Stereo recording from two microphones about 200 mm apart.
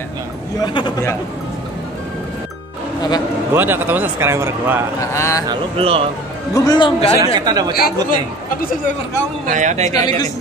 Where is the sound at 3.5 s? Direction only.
10° right (ahead or behind).